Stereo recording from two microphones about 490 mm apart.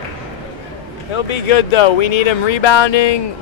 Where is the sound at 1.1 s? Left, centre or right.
Left.